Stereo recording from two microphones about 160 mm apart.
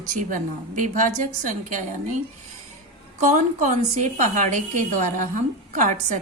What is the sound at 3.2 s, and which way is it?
A woman's voice, 50° right (ahead or behind).